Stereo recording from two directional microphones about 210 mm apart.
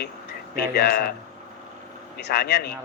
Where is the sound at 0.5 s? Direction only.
45° left (ahead or behind).